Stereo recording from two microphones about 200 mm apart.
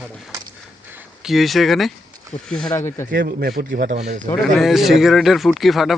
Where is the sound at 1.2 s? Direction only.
Centre (ahead or behind).